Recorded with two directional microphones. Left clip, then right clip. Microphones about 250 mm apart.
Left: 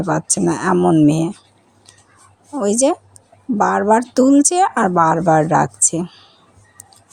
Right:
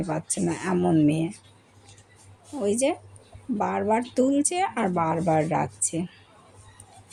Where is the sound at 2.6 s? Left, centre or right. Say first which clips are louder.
Left 8 dB; left.